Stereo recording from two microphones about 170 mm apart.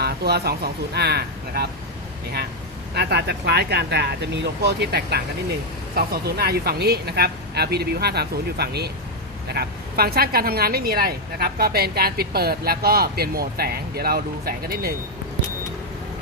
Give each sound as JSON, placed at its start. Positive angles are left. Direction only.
{"t": 0.0, "sound": "speech", "side_deg": -70}
{"t": 2.9, "sound": "a woman's voice", "side_deg": -75}